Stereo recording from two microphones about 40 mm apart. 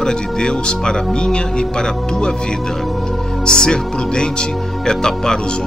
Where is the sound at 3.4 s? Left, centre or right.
Centre.